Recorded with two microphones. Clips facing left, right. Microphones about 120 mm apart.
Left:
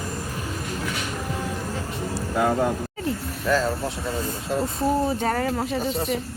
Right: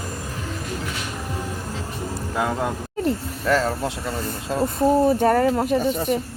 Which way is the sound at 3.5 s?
80° right.